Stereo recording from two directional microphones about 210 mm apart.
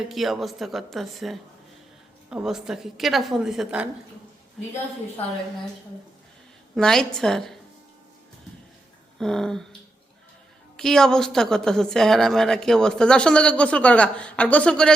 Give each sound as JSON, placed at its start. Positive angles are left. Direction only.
{"t": 0.1, "sound": "a woman's voice", "side_deg": 0}
{"t": 6.7, "sound": "a woman's voice", "side_deg": 5}
{"t": 9.1, "sound": "a woman's voice", "side_deg": 0}
{"t": 10.8, "sound": "a woman's voice", "side_deg": 0}